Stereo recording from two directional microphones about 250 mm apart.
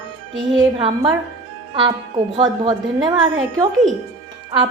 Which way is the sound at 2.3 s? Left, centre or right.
Centre.